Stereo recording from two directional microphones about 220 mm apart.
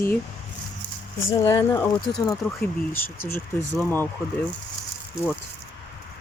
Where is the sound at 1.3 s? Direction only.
15° left (ahead or behind).